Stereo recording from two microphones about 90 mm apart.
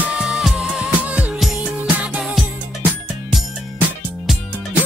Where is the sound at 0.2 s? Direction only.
5° right (ahead or behind).